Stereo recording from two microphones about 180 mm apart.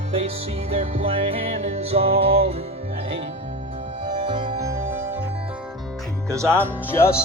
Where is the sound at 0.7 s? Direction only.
35° right (ahead or behind).